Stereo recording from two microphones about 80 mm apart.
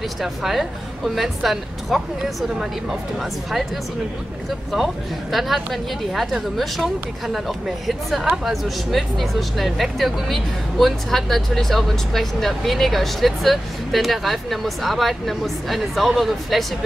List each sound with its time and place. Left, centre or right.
0.2 s speech: centre
4.7 s speech: centre